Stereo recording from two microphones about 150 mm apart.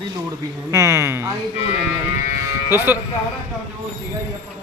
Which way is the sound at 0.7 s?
20° right (ahead or behind).